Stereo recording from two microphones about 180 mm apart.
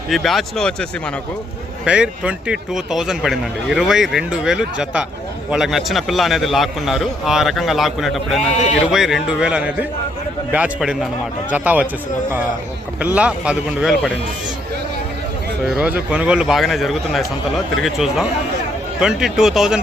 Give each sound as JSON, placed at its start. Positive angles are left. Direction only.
{"t": 0.1, "sound": "speech", "side_deg": 0}
{"t": 8.4, "sound": "a man's voice", "side_deg": 40}
{"t": 8.9, "sound": "speech", "side_deg": 0}
{"t": 13.0, "sound": "speech", "side_deg": -5}
{"t": 15.6, "sound": "speech", "side_deg": -5}